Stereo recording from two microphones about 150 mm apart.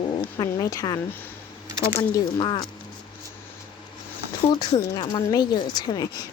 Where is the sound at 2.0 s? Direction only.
30° left (ahead or behind).